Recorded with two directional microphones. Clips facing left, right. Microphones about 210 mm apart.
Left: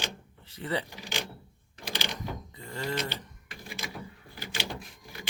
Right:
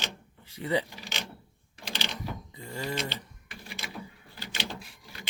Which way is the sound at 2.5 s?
15° right (ahead or behind).